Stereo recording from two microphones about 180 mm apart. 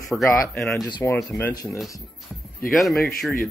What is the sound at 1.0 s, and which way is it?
Speech, 10° left (ahead or behind).